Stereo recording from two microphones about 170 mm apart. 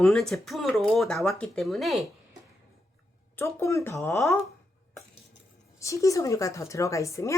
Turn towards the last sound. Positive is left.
turn(degrees=20)  # may be behind; listen again after turning